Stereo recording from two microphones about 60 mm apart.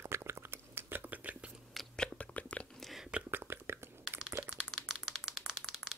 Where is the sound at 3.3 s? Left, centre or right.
Right.